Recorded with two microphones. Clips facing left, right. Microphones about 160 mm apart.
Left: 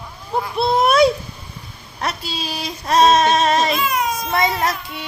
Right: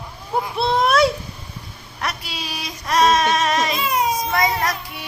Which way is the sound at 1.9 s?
30° left (ahead or behind).